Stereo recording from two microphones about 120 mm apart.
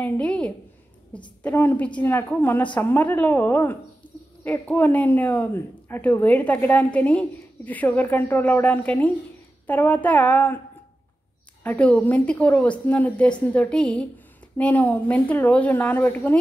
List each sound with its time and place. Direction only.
0.0 s a sound: 10° left (ahead or behind)
1.1 s a woman's voice: 15° left (ahead or behind)
11.6 s a woman's voice: 10° left (ahead or behind)